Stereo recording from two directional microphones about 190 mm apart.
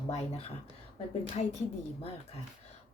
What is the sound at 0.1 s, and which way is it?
Speech, 35° left (ahead or behind).